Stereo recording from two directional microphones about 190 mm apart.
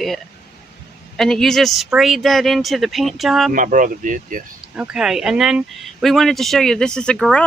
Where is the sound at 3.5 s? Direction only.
45° right (ahead or behind).